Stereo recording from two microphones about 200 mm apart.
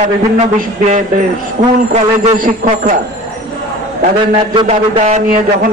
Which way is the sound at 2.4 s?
40° right (ahead or behind).